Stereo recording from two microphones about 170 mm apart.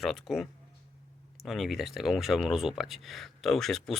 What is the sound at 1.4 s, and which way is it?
Speech, centre (ahead or behind).